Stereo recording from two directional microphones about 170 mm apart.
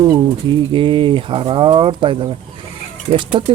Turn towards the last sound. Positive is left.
turn(degrees=-30)  # may be behind; listen again after turning